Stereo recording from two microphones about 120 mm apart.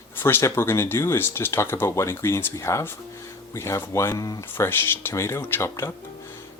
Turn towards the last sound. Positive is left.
turn(degrees=20)  # may be behind; listen again after turning